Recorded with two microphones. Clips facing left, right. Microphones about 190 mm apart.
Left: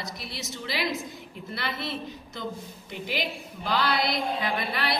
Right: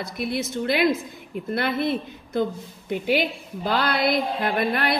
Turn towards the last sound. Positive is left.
turn(degrees=-50)  # may be behind; listen again after turning